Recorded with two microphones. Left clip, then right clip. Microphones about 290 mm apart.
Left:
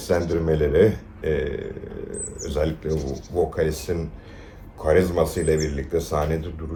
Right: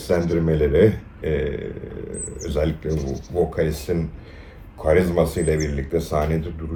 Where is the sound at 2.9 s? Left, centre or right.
Left.